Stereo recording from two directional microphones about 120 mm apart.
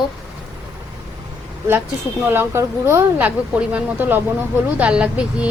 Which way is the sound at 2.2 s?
20° right (ahead or behind).